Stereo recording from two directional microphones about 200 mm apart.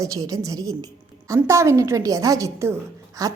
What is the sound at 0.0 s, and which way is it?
A woman's voice, 15° right (ahead or behind).